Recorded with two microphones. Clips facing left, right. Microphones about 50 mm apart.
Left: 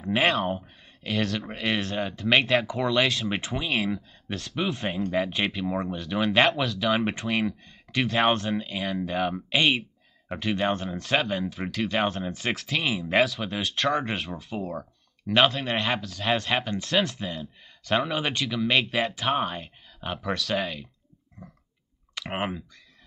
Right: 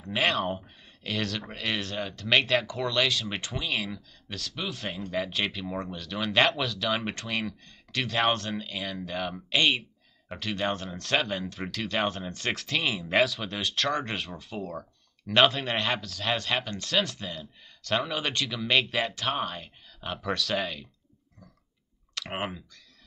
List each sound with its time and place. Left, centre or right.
0.0 s speech: centre
21.4 s a sound: left
22.1 s speech: centre